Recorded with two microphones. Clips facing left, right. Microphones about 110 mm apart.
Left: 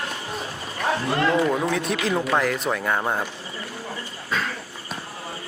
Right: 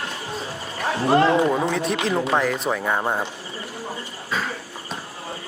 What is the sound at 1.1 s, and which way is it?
Speech, 30° right (ahead or behind).